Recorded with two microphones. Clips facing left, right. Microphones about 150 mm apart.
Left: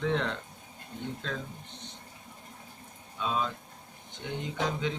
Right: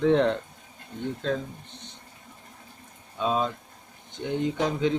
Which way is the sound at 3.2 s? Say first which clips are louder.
Right 5 dB; 35° right (ahead or behind).